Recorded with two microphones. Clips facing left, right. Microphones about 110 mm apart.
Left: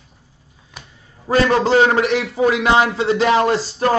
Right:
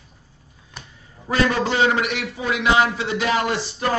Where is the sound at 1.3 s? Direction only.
45° left (ahead or behind).